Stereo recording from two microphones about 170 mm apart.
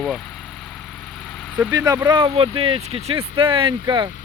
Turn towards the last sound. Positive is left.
turn(degrees=-30)  # may be behind; listen again after turning